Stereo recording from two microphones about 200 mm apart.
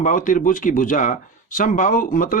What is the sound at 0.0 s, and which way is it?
Speech, 40° left (ahead or behind).